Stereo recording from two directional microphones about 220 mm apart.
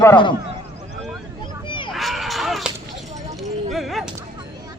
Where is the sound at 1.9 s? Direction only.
Centre (ahead or behind).